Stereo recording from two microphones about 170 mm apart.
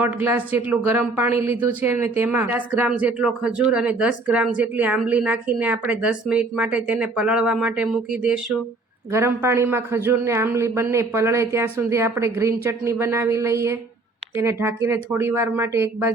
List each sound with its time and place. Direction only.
0.0 s speech: 10° right (ahead or behind)